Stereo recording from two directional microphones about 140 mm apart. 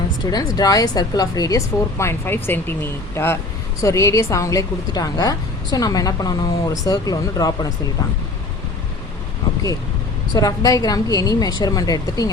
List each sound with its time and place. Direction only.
0.3 s a woman's voice: 25° left (ahead or behind)
10.3 s a woman's voice: 25° left (ahead or behind)